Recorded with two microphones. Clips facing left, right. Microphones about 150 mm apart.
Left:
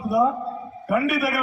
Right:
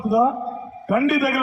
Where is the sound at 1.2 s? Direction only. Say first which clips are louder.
Right 3 dB; centre (ahead or behind).